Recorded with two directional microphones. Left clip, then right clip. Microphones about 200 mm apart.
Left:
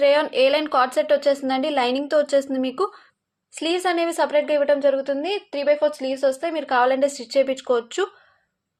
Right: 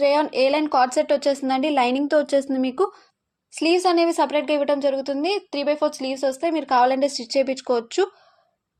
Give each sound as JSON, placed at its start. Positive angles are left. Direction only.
{"t": 0.7, "sound": "a woman's voice", "side_deg": -30}